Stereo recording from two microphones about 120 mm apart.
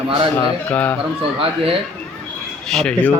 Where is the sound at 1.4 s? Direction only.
50° right (ahead or behind).